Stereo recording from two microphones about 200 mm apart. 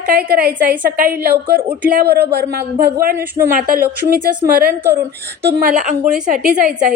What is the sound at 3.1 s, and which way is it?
Speech, 10° right (ahead or behind).